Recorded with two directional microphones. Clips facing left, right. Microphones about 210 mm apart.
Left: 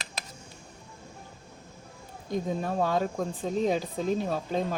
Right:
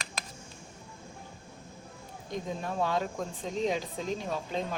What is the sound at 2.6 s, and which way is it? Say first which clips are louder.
Speech: left 1 dB; 40° left (ahead or behind).